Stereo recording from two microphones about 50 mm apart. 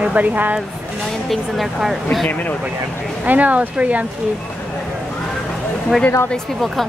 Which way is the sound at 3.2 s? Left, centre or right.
Right.